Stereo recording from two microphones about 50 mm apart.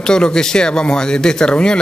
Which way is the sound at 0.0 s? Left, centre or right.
Centre.